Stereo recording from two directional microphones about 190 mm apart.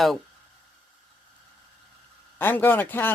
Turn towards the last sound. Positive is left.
turn(degrees=10)  # may be behind; listen again after turning